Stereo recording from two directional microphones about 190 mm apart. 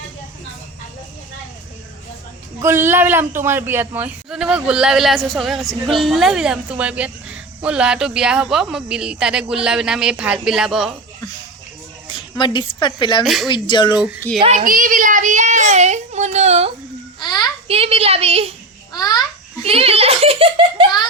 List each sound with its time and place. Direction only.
2.6 s speech: 15° right (ahead or behind)
12.0 s a woman's voice: 25° left (ahead or behind)
13.2 s speech: centre (ahead or behind)
13.5 s speech: 25° left (ahead or behind)
14.0 s speech: 10° right (ahead or behind)
14.4 s speech: 40° right (ahead or behind)
17.2 s a sound: 25° left (ahead or behind)
17.7 s a child's voice: 30° right (ahead or behind)
18.9 s babbling: 20° left (ahead or behind)
19.6 s a child's voice: 30° right (ahead or behind)